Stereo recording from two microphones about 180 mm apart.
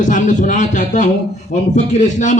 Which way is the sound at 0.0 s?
45° left (ahead or behind).